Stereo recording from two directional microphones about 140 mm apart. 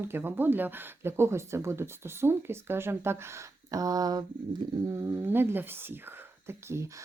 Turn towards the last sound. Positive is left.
turn(degrees=-20)  # may be behind; listen again after turning